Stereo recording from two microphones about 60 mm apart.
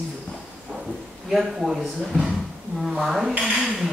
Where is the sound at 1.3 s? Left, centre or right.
Centre.